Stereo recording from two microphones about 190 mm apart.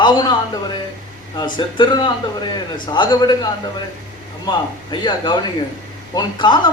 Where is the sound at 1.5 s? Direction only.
25° left (ahead or behind).